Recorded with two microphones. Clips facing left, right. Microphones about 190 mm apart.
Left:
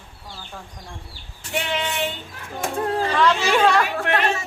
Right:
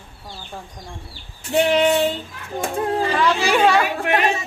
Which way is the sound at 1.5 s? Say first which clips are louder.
Right 10 dB; 35° right (ahead or behind).